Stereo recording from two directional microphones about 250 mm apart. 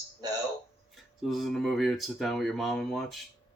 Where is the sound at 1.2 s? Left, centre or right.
Centre.